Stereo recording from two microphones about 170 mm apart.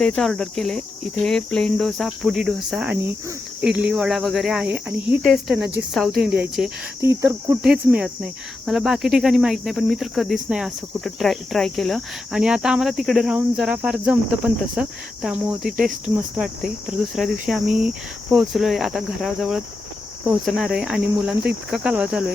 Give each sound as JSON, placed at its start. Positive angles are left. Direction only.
{"t": 0.0, "sound": "cricket", "side_deg": 5}
{"t": 7.0, "sound": "cricket", "side_deg": -15}